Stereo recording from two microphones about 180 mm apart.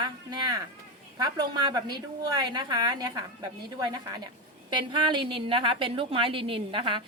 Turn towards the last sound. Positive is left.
turn(degrees=-30)  # may be behind; listen again after turning